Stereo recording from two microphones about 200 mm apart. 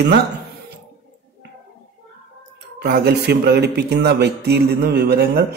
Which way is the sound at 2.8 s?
55° right (ahead or behind).